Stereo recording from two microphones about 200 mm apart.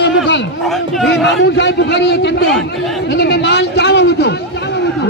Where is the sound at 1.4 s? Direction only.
60° left (ahead or behind).